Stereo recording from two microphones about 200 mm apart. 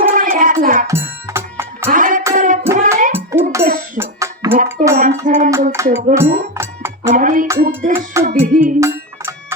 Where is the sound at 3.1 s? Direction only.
10° right (ahead or behind).